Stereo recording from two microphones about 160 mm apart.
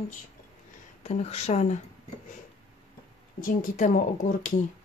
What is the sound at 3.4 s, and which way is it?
Speech, 55° left (ahead or behind).